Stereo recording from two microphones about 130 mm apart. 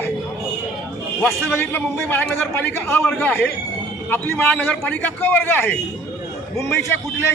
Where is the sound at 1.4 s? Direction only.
15° left (ahead or behind).